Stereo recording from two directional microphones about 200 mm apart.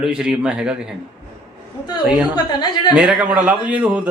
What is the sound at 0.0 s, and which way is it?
Speech, 5° right (ahead or behind).